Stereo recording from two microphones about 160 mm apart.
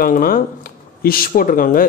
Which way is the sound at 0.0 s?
60° left (ahead or behind).